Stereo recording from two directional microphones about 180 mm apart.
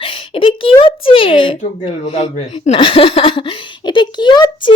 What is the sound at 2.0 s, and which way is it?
Speech, 35° left (ahead or behind).